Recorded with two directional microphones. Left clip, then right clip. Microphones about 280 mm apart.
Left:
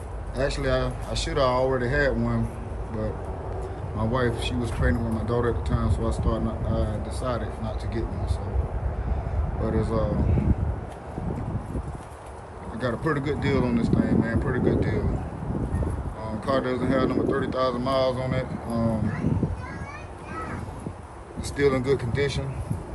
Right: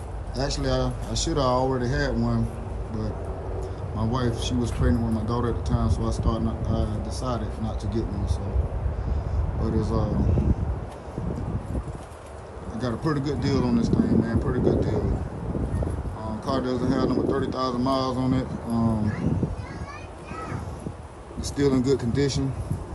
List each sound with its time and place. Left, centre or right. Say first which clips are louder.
0.4 s speech: left 1 dB; centre
4.0 s speech: left 2 dB; centre
9.6 s speech: left 2 dB; centre
12.8 s speech: left 1 dB; centre
16.4 s speech: left 2 dB; centre
21.4 s speech: left 1 dB; centre